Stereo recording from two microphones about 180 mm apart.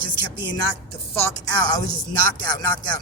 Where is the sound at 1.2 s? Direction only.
20° left (ahead or behind).